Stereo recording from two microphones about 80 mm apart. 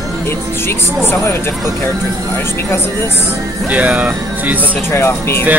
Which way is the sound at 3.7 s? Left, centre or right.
Centre.